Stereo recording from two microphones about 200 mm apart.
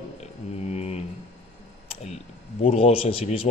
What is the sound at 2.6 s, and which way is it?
Speech, 30° left (ahead or behind).